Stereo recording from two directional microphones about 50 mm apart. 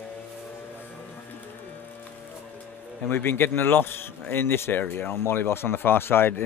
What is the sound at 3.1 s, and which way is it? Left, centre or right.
Speech, left.